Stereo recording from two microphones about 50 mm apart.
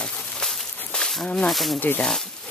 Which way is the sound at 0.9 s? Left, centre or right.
Centre.